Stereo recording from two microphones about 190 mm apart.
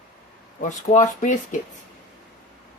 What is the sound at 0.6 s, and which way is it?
Speech, 40° left (ahead or behind).